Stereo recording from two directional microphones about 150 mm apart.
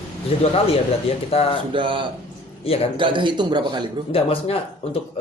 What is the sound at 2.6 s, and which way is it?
Speech, 40° left (ahead or behind).